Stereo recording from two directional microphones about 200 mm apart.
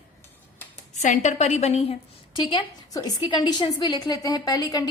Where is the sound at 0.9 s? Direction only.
35° left (ahead or behind).